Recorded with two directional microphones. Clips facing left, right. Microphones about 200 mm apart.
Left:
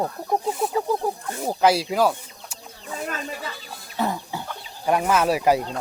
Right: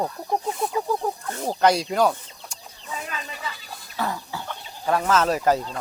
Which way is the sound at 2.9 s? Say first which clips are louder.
Left 4 dB; 45° left (ahead or behind).